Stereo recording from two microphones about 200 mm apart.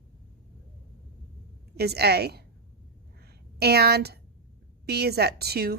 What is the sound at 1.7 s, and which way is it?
Speech, 55° right (ahead or behind).